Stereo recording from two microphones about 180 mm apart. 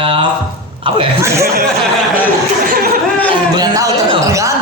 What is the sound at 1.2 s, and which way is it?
Speech, 15° right (ahead or behind).